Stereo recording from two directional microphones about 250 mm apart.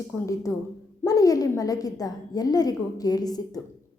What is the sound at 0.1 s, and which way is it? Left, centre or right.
A woman's voice, centre.